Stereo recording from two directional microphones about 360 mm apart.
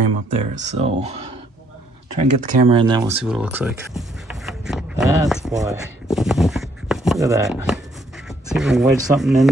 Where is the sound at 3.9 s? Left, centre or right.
Centre.